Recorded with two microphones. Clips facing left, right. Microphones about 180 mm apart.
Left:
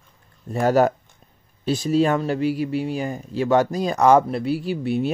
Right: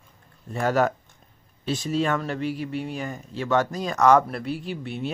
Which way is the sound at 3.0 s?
35° left (ahead or behind).